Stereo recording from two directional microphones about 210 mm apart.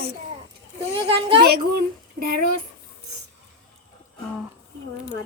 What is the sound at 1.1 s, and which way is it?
Speech, 25° right (ahead or behind).